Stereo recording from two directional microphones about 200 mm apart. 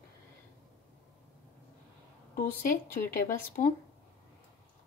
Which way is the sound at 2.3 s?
45° left (ahead or behind).